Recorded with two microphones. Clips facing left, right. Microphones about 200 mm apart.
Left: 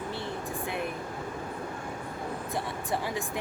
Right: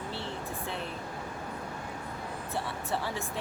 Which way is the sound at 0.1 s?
15° left (ahead or behind).